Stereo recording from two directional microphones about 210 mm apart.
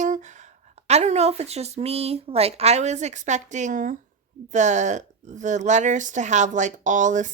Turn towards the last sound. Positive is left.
turn(degrees=-35)  # may be behind; listen again after turning